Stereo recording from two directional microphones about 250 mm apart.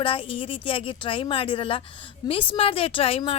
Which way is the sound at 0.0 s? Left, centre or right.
Left.